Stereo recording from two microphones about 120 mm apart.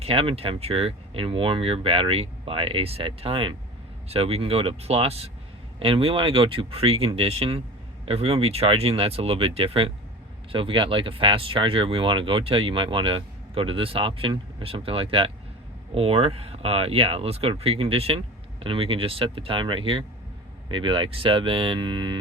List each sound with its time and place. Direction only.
0.0 s speech: 50° right (ahead or behind)